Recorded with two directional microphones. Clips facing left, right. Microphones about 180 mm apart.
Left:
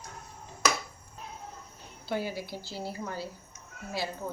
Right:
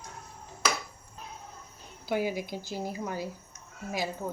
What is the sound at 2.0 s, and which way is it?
Speech, 15° right (ahead or behind).